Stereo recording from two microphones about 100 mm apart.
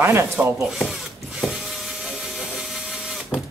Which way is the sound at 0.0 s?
25° right (ahead or behind).